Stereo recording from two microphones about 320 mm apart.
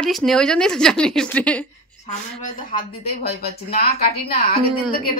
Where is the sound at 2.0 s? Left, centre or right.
Left.